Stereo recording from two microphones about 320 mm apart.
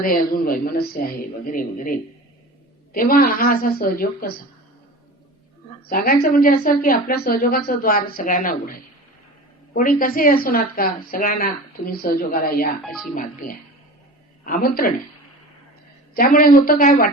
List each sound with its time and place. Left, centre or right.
0.0 s a woman's voice: left
5.9 s a woman's voice: left
12.8 s speech: centre
13.1 s a woman's voice: left
16.1 s a woman's voice: left